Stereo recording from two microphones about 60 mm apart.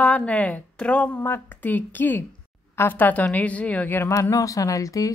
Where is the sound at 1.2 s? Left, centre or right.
Left.